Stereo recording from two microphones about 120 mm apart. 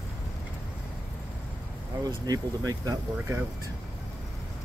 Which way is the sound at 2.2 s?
30° right (ahead or behind).